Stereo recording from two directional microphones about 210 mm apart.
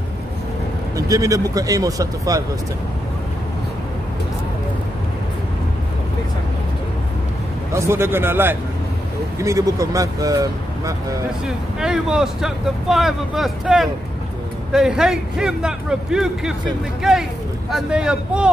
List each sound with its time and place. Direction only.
0.9 s speech: 15° right (ahead or behind)
7.7 s speech: 10° right (ahead or behind)
11.4 s speech: 5° right (ahead or behind)